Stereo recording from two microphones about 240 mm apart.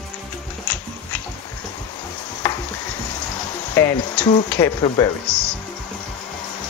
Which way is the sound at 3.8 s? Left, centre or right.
Centre.